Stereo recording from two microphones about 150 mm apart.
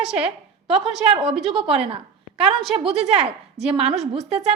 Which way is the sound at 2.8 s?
45° right (ahead or behind).